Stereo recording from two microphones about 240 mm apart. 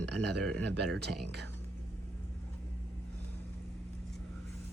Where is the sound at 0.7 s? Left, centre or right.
Right.